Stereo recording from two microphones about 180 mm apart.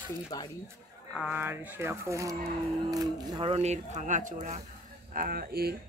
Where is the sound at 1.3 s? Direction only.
10° right (ahead or behind).